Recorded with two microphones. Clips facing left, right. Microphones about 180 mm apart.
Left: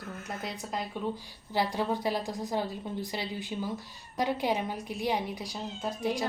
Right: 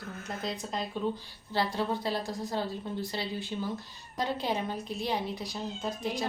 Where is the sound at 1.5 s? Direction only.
15° left (ahead or behind).